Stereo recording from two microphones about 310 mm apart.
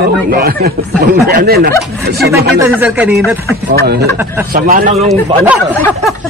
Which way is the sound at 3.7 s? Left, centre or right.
Right.